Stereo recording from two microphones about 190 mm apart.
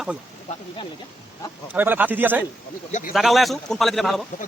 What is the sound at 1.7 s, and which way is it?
Speech, 10° right (ahead or behind).